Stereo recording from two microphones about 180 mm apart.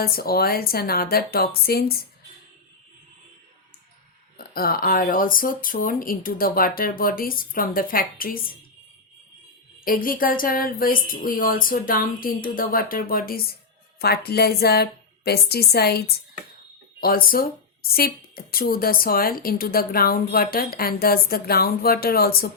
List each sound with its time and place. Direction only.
0.0 s speech: 55° left (ahead or behind)
4.5 s speech: 55° left (ahead or behind)
9.8 s speech: 50° left (ahead or behind)